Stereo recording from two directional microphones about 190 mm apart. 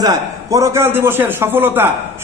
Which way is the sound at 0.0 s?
15° right (ahead or behind).